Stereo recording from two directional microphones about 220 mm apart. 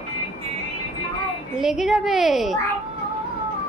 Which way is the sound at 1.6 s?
Centre (ahead or behind).